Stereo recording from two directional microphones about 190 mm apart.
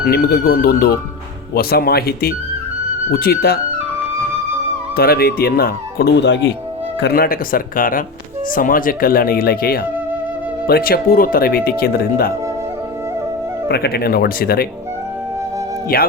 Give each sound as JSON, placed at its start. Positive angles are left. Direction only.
{"t": 0.0, "sound": "speech", "side_deg": 55}
{"t": 4.9, "sound": "speech", "side_deg": 55}
{"t": 7.0, "sound": "speech", "side_deg": 50}
{"t": 13.7, "sound": "speech", "side_deg": 55}
{"t": 15.9, "sound": "speech", "side_deg": 50}